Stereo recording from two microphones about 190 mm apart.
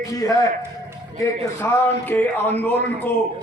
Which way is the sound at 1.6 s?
10° left (ahead or behind).